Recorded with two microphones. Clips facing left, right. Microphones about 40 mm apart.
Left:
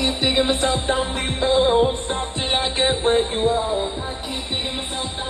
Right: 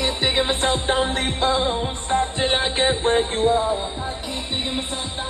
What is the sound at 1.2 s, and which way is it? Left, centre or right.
Music, right.